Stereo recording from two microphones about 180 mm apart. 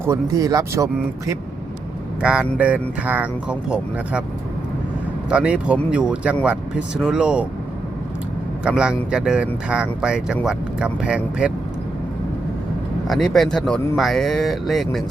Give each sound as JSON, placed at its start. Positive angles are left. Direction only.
{"t": 0.0, "sound": "speech", "side_deg": -20}
{"t": 2.2, "sound": "speech", "side_deg": -5}
{"t": 5.3, "sound": "speech", "side_deg": -5}
{"t": 8.6, "sound": "speech", "side_deg": -5}
{"t": 13.1, "sound": "speech", "side_deg": 0}